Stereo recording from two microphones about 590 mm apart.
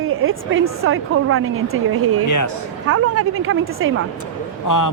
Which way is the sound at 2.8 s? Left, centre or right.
Right.